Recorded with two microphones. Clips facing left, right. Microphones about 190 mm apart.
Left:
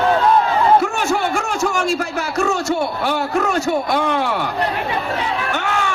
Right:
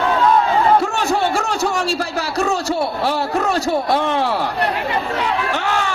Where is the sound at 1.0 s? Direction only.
30° right (ahead or behind).